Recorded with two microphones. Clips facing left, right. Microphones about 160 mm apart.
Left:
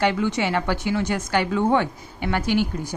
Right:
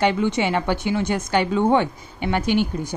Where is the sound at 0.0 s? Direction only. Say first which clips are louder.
Right 2 dB; 20° right (ahead or behind).